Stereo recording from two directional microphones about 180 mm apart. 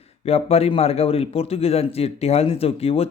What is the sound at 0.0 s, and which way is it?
A man's voice, 35° left (ahead or behind).